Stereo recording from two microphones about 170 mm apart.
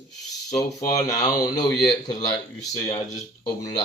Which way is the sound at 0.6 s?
20° left (ahead or behind).